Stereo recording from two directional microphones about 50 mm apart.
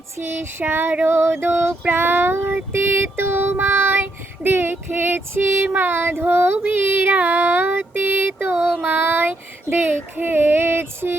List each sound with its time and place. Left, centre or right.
0.2 s child singing: right
1.9 s child singing: right
5.6 s child singing: right